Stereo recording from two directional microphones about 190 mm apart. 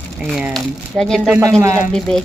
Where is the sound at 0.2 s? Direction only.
Centre (ahead or behind).